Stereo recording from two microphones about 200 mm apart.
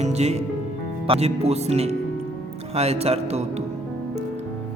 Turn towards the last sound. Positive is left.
turn(degrees=-35)  # may be behind; listen again after turning